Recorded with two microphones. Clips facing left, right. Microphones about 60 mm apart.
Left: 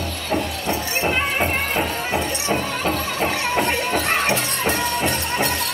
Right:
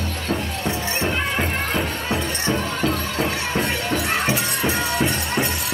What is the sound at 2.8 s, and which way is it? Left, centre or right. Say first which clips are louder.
Music: right 1 dB; left.